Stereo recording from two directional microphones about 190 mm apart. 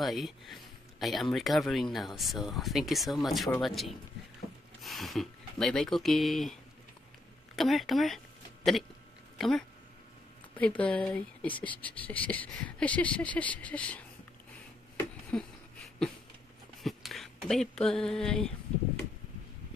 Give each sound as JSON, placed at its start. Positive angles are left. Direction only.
{"t": 0.0, "sound": "speech", "side_deg": 0}
{"t": 7.5, "sound": "speech", "side_deg": 0}
{"t": 9.4, "sound": "speech", "side_deg": 0}
{"t": 15.3, "sound": "a sound", "side_deg": 5}
{"t": 16.8, "sound": "speech", "side_deg": 0}